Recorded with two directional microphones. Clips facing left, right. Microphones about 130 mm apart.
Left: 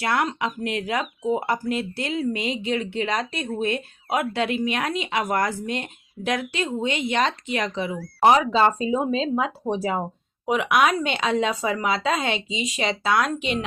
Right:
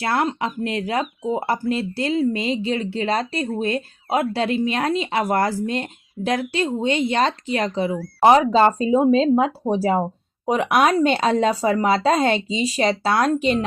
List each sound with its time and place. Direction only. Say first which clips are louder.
0.0 s speech: right 2 dB; 35° right (ahead or behind)